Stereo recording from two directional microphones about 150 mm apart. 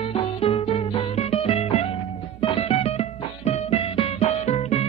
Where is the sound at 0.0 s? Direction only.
35° left (ahead or behind).